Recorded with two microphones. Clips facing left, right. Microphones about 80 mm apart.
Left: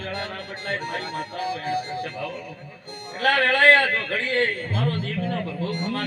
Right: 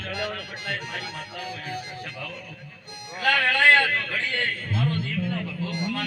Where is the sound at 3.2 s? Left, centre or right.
Left.